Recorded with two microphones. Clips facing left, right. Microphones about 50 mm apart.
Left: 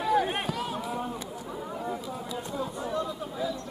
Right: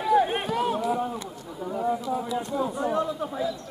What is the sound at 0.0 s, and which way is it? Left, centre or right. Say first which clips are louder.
Run: right 4 dB; centre.